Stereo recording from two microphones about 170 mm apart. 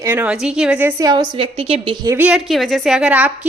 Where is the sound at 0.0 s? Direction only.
10° right (ahead or behind); by 2.1 s 30° right (ahead or behind).